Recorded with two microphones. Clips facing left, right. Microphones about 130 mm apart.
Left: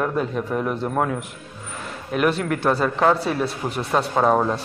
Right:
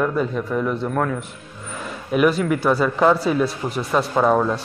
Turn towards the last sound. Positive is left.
turn(degrees=5)  # may be behind; listen again after turning